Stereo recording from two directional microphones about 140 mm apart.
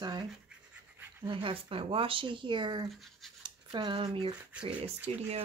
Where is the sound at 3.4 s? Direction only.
35° right (ahead or behind).